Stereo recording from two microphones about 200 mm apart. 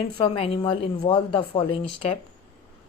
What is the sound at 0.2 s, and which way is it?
Speech, 25° left (ahead or behind).